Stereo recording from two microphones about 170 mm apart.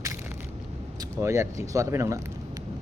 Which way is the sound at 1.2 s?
15° right (ahead or behind).